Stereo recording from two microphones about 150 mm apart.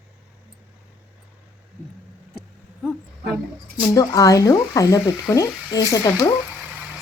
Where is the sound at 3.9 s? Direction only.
25° left (ahead or behind).